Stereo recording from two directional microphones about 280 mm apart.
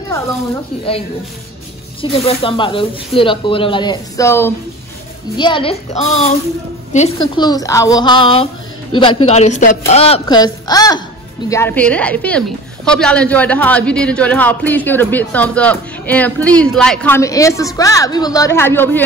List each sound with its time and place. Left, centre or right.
2.0 s a woman's voice: centre